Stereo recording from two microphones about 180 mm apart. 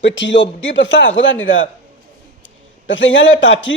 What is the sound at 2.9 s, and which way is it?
Speech, 90° left.